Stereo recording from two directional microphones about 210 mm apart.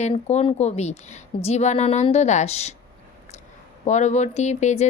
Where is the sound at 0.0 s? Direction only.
30° left (ahead or behind).